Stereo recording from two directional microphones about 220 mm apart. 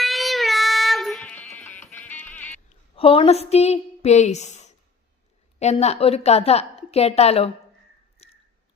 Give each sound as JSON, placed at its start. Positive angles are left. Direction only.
{"t": 0.0, "sound": "music", "side_deg": 0}
{"t": 2.6, "sound": "a woman's voice", "side_deg": 25}
{"t": 8.2, "sound": "squish", "side_deg": 30}